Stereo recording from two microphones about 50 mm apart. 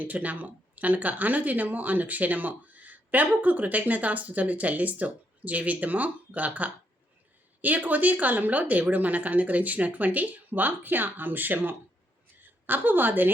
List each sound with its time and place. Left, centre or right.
0.0 s a woman's voice: right